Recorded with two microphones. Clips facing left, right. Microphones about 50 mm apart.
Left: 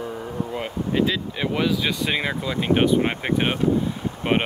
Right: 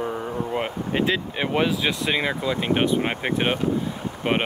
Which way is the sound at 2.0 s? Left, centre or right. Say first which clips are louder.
Right 1 dB; centre.